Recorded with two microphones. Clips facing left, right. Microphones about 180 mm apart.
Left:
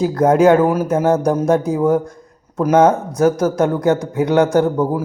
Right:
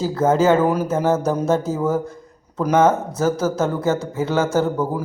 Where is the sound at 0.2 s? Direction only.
15° left (ahead or behind).